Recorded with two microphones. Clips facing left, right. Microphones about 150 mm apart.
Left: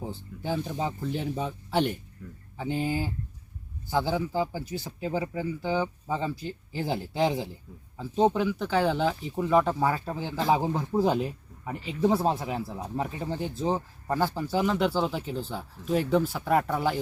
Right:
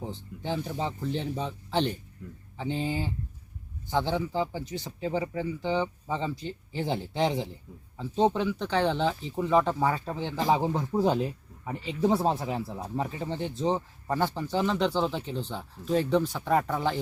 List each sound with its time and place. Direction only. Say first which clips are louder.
0.0 s speech: left 1 dB; 5° left (ahead or behind)